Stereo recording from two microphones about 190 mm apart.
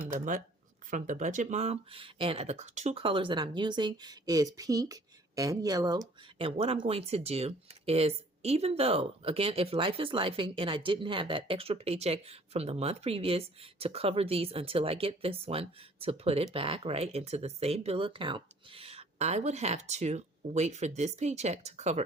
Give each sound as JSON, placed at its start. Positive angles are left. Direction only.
{"t": 0.0, "sound": "speech", "side_deg": -45}